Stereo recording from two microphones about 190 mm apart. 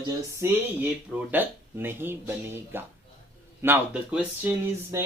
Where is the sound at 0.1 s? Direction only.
15° right (ahead or behind).